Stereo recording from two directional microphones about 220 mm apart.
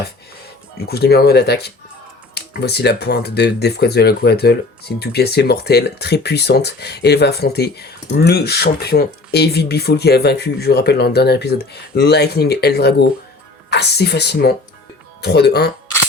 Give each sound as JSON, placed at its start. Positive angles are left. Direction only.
{"t": 0.8, "sound": "speech", "side_deg": 45}